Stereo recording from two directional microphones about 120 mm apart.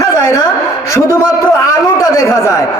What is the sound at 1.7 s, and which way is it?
Speech, 25° left (ahead or behind).